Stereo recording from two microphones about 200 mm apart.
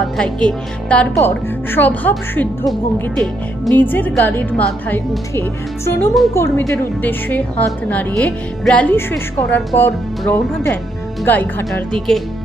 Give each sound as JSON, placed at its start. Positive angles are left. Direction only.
{"t": 0.0, "sound": "a woman's voice", "side_deg": 5}